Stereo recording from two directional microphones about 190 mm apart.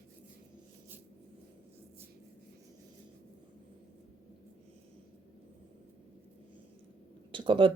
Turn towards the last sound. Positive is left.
turn(degrees=-25)  # may be behind; listen again after turning